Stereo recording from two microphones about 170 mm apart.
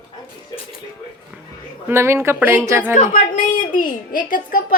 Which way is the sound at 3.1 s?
50° left (ahead or behind).